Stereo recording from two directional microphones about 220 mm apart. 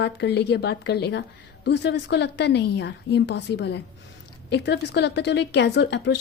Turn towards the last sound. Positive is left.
turn(degrees=50)  # may be behind; listen again after turning